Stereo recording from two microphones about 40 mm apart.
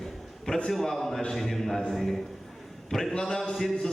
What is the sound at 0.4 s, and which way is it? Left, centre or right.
A man's voice, centre.